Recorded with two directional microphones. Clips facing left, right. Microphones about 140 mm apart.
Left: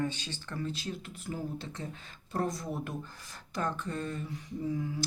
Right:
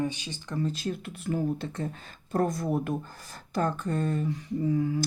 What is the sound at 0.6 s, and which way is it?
Speech, 45° right (ahead or behind).